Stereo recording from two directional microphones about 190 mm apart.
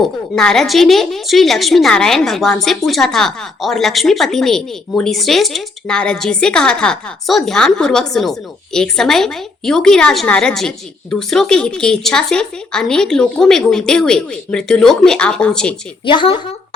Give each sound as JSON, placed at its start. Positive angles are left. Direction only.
{"t": 0.3, "sound": "a woman's voice", "side_deg": 0}
{"t": 16.0, "sound": "a woman's voice", "side_deg": 25}